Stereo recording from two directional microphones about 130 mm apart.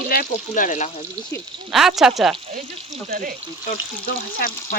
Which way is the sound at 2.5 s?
90° right.